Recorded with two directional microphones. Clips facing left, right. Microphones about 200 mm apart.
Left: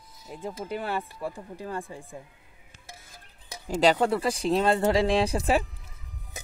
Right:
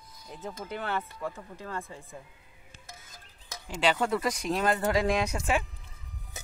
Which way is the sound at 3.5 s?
40° left (ahead or behind).